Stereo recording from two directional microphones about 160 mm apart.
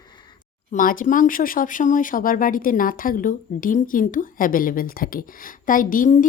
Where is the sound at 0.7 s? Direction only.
60° left (ahead or behind).